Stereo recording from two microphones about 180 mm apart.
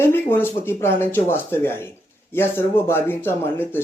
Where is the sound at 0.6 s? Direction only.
15° left (ahead or behind).